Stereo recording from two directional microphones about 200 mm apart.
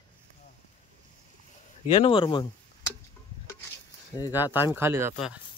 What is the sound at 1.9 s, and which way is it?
Speech, 25° left (ahead or behind).